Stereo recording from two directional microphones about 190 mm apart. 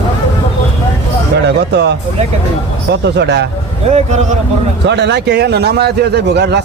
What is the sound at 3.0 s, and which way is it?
Speech, 65° right (ahead or behind).